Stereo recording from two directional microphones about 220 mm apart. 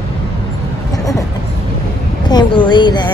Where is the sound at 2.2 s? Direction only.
20° left (ahead or behind).